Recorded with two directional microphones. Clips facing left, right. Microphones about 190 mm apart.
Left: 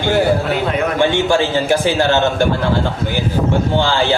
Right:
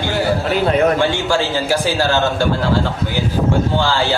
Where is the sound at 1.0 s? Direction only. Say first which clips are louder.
Left 3 dB; 20° left (ahead or behind).